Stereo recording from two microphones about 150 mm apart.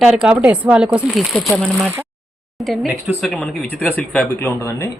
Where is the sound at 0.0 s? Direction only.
5° right (ahead or behind).